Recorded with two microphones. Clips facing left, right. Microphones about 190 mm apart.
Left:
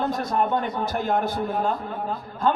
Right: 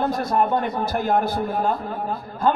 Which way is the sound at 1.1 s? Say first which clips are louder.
Right 3 dB; 40° right (ahead or behind).